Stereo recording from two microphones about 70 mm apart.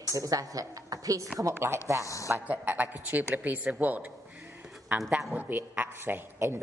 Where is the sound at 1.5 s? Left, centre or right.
Right.